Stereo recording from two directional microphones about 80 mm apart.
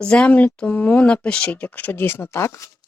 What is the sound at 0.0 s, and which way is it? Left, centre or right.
Speech, centre.